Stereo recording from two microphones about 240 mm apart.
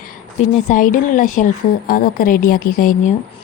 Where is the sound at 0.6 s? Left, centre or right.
Left.